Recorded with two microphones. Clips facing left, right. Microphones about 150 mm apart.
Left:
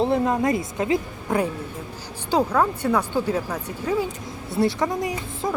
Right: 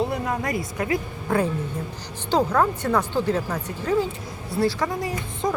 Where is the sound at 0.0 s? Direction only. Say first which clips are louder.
Left 5 dB; 25° left (ahead or behind).